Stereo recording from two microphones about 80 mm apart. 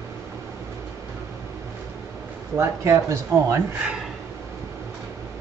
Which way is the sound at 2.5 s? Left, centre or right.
Right.